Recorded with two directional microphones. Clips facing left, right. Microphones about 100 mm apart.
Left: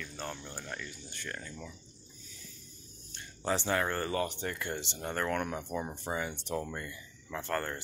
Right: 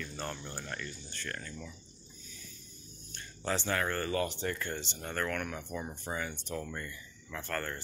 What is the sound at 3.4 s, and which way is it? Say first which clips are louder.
Speech: left 2 dB; 20° left (ahead or behind).